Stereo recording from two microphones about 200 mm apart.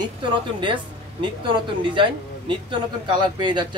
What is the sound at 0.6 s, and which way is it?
A woman's voice, 25° right (ahead or behind).